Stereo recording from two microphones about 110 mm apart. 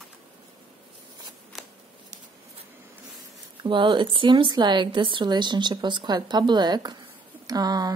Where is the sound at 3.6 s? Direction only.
45° right (ahead or behind).